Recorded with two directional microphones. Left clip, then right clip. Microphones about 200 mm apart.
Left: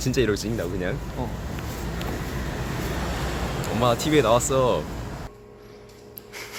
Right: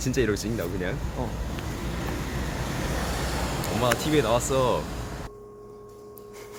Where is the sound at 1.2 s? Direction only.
15° right (ahead or behind).